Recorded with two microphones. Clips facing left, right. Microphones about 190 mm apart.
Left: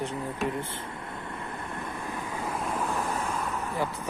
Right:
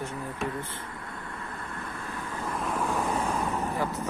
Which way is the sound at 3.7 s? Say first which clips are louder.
Right 1 dB; 10° left (ahead or behind).